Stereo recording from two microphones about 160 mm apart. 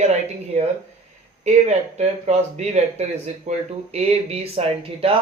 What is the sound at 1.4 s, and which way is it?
Speech, 45° right (ahead or behind).